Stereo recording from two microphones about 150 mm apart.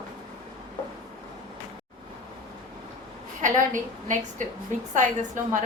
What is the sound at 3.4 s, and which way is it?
A woman's voice, 60° right (ahead or behind).